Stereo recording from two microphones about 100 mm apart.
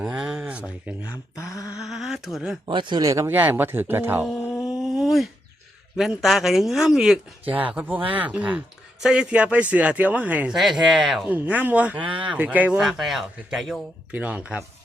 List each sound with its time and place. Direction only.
0.0 s a sound: 10° right (ahead or behind)
0.9 s speech: 10° right (ahead or behind)
1.4 s a sound: 35° left (ahead or behind)
1.8 s a sound: 5° right (ahead or behind)
2.6 s speech: 50° right (ahead or behind)
3.0 s speech: 35° right (ahead or behind)
3.2 s speech: 20° right (ahead or behind)
4.7 s a sound: 5° right (ahead or behind)
6.0 s speech: centre (ahead or behind)
10.5 s speech: 5° right (ahead or behind)
11.3 s speech: 15° right (ahead or behind)
12.8 s speech: centre (ahead or behind)
14.1 s speech: 15° right (ahead or behind)